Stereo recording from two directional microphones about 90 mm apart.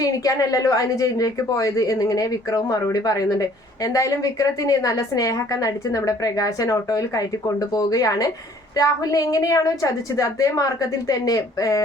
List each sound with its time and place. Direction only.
0.0 s a woman's voice: 45° left (ahead or behind)